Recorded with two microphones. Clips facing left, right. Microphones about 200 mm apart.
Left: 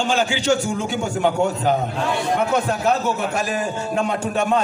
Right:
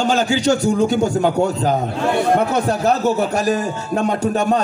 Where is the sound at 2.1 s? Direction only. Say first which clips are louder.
Right 7 dB; 55° right (ahead or behind).